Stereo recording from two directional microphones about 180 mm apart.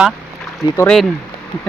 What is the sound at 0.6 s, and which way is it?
Speech, 20° left (ahead or behind).